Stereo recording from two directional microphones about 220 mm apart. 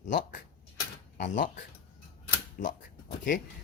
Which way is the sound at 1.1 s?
35° left (ahead or behind).